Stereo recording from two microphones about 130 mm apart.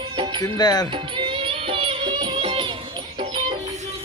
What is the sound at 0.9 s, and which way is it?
Music, 40° right (ahead or behind).